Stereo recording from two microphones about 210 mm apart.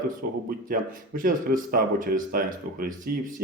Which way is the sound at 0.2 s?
45° right (ahead or behind).